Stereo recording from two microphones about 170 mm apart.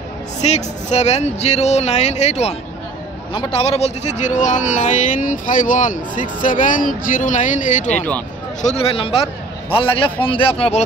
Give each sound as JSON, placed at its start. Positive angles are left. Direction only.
{"t": 0.4, "sound": "speech", "side_deg": 40}
{"t": 8.6, "sound": "speech", "side_deg": 35}